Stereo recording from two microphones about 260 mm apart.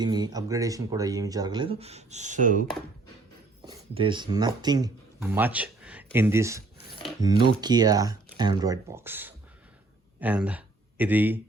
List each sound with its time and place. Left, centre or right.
0.0 s speech: centre; by 2.6 s right
3.7 s speech: centre